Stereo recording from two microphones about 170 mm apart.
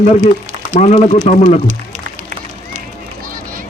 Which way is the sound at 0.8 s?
40° left (ahead or behind).